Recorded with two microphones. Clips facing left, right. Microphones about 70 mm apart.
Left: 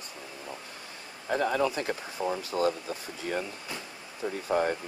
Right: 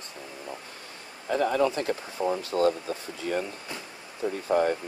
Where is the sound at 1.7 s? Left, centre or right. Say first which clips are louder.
Right 3 dB; centre.